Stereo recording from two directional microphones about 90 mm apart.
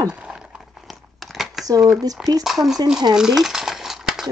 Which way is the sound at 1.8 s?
5° right (ahead or behind).